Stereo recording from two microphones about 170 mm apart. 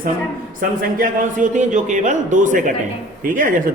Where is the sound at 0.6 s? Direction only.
50° right (ahead or behind).